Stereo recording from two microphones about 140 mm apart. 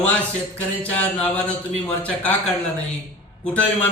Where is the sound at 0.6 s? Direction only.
10° left (ahead or behind).